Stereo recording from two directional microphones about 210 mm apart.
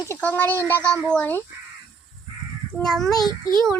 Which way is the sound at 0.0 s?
10° left (ahead or behind).